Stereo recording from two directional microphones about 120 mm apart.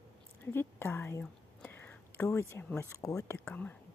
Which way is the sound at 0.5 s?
20° left (ahead or behind).